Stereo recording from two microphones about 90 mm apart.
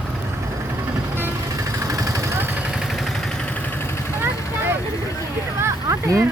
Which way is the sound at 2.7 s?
Centre (ahead or behind).